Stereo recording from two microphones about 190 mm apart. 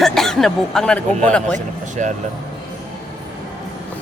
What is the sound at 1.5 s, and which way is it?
Speech, 40° right (ahead or behind).